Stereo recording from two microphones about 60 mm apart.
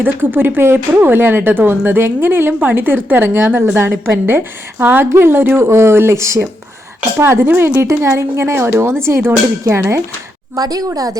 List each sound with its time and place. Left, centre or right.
0.0 s speech: right
5.6 s speech: right
10.5 s a woman's voice: right